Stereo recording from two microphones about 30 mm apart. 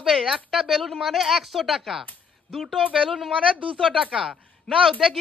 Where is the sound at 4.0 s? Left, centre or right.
Right.